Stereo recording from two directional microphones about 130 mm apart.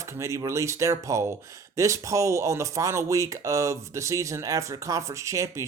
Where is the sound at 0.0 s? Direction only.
20° right (ahead or behind).